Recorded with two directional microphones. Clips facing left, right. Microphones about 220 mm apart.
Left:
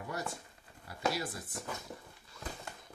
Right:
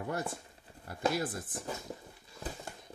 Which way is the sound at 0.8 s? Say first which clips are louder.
Right 3 dB; 50° right (ahead or behind).